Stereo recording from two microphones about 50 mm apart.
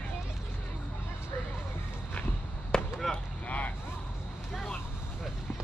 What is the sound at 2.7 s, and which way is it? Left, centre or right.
Basketball bounce, centre.